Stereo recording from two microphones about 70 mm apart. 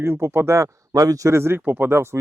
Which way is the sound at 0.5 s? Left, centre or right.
Right.